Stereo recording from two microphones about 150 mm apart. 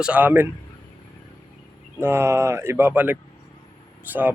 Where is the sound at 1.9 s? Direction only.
15° right (ahead or behind).